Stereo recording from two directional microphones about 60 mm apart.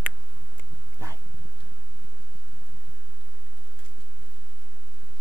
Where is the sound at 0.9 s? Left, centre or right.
Left.